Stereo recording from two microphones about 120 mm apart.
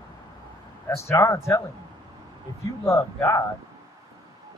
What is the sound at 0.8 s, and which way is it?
Speech, 25° left (ahead or behind).